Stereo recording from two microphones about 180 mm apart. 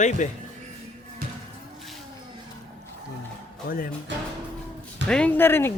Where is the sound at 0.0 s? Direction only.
40° left (ahead or behind).